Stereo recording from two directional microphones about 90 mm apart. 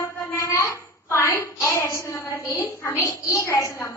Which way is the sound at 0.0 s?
30° left (ahead or behind).